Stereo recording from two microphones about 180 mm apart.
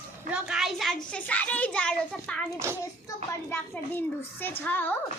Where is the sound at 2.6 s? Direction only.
15° right (ahead or behind).